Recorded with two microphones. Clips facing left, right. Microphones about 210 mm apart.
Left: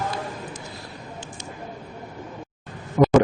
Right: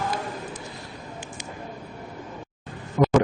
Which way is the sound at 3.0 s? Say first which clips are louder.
Left 3 dB; 55° left (ahead or behind).